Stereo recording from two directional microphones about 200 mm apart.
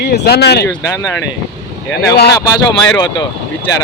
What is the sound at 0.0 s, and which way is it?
Speech, 55° left (ahead or behind).